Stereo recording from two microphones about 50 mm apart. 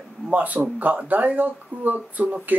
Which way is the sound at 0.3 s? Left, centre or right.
Right.